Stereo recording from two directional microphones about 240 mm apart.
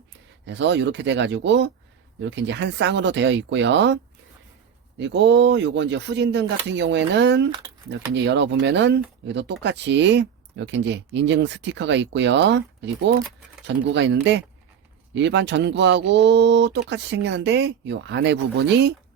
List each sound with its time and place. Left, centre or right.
0.4 s speech: right